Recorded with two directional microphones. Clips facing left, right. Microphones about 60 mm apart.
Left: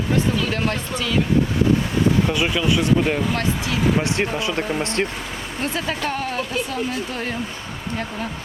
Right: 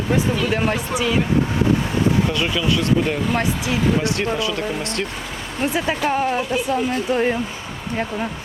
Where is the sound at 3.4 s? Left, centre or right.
Centre.